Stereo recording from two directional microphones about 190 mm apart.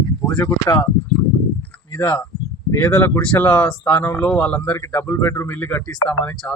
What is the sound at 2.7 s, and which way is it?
A man's voice, 10° left (ahead or behind).